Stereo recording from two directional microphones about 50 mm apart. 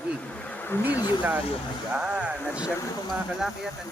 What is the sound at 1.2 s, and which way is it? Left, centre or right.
A man's voice, right.